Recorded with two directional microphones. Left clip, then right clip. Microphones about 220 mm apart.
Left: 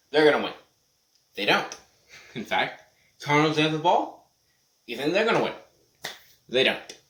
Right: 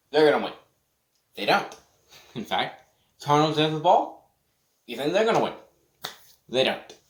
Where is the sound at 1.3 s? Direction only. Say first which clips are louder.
Even; 10° right (ahead or behind).